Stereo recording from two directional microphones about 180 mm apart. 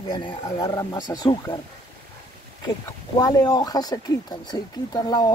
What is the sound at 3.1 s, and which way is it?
Speech, 20° left (ahead or behind).